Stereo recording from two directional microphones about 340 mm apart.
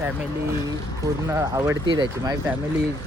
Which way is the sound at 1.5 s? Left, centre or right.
Centre.